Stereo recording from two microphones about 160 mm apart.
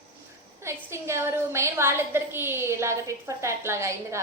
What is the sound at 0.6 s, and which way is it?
A woman's voice, 15° right (ahead or behind).